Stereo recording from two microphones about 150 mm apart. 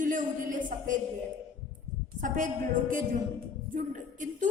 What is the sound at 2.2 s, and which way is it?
A woman's voice, 60° right (ahead or behind).